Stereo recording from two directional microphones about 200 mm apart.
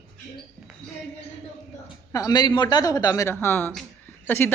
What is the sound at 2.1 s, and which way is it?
A woman's voice, 20° left (ahead or behind).